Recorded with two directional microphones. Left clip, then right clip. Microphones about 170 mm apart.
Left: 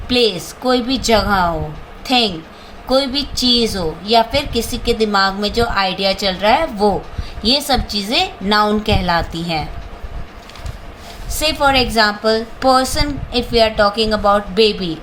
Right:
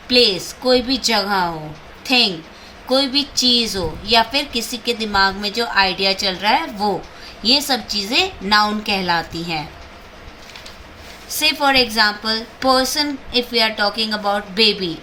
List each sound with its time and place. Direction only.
0.1 s a woman's voice: 70° left (ahead or behind)
11.3 s a woman's voice: 65° left (ahead or behind)